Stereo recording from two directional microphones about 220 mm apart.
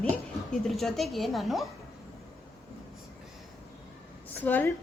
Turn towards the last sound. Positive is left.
turn(degrees=10)  # may be behind; listen again after turning